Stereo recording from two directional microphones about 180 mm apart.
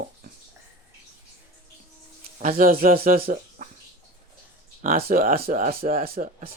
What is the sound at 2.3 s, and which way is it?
Speech, 45° right (ahead or behind).